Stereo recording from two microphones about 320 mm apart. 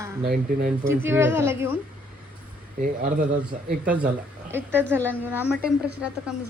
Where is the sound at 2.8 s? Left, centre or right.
Right.